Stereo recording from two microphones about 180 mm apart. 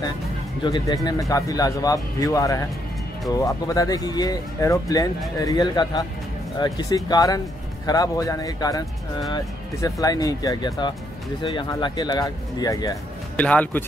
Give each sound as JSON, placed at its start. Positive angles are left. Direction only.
{"t": 0.6, "sound": "speech", "side_deg": 25}
{"t": 13.4, "sound": "speech", "side_deg": 10}